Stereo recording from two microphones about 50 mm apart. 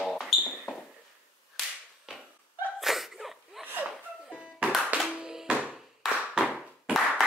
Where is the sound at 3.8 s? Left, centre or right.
Right.